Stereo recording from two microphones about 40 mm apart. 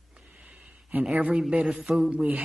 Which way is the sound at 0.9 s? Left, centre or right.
Right.